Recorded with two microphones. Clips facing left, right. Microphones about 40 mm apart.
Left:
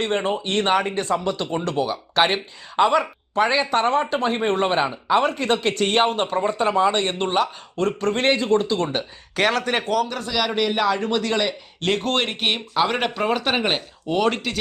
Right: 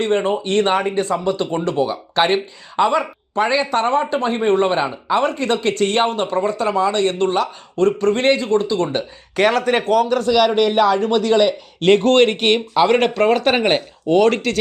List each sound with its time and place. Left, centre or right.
0.0 s speech: centre
6.3 s speech: left
7.4 s speech: centre
9.3 s speech: centre